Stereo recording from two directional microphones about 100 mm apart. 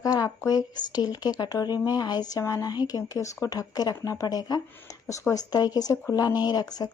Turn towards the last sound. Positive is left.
turn(degrees=40)  # may be behind; listen again after turning